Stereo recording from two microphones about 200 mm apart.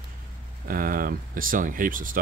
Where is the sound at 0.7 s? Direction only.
45° right (ahead or behind).